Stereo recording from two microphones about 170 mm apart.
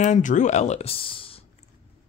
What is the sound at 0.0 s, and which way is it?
Speech, 45° left (ahead or behind).